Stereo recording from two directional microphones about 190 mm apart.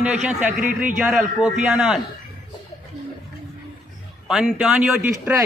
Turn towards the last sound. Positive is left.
turn(degrees=-10)  # may be behind; listen again after turning